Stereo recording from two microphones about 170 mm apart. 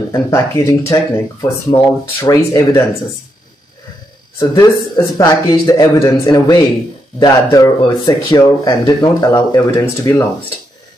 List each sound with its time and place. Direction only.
0.1 s speech: 20° left (ahead or behind)
4.4 s speech: 20° left (ahead or behind)